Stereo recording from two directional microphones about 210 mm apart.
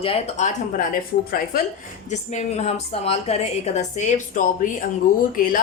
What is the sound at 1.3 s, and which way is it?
Speech, 45° left (ahead or behind).